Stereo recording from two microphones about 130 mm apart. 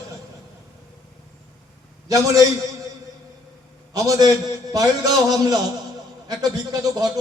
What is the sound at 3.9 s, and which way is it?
A man's voice, 30° right (ahead or behind).